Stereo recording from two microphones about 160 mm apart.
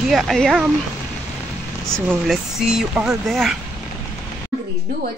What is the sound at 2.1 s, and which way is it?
Speech, 5° right (ahead or behind).